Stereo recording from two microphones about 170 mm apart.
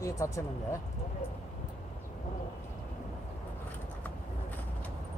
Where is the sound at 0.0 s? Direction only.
15° left (ahead or behind).